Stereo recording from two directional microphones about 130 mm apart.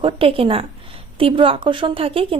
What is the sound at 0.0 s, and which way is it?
A woman's voice, 45° right (ahead or behind).